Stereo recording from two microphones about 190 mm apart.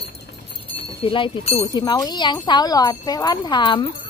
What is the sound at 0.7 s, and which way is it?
Speech, 25° left (ahead or behind).